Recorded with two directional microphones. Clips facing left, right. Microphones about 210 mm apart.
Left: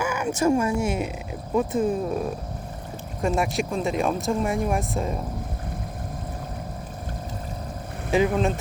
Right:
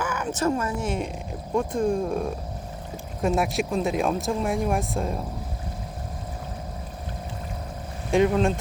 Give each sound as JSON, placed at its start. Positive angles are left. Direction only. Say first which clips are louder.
{"t": 0.0, "sound": "speech", "louder": "left 3 dB", "side_deg": 10}
{"t": 8.1, "sound": "speech", "louder": "right 1 dB", "side_deg": 0}